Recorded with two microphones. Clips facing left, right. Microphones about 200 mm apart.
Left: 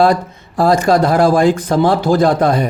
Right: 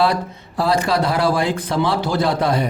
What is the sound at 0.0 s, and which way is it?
Speech, 45° left (ahead or behind).